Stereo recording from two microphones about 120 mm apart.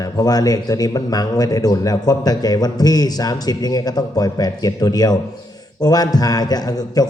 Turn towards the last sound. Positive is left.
turn(degrees=30)  # may be behind; listen again after turning